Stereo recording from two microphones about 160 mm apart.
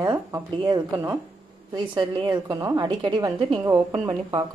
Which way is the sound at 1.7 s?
30° right (ahead or behind).